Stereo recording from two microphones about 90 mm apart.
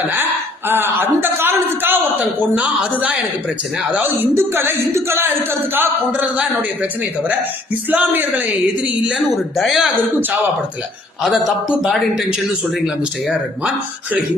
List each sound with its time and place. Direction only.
0.7 s music: 25° right (ahead or behind)
2.6 s speech: 15° right (ahead or behind)
4.4 s music: 30° right (ahead or behind)
6.1 s speech: 15° right (ahead or behind)
7.9 s speech: 20° right (ahead or behind)
9.1 s speech: centre (ahead or behind)
11.2 s speech: centre (ahead or behind)